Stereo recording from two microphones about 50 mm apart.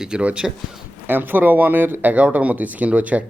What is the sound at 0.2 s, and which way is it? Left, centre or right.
Speech, right.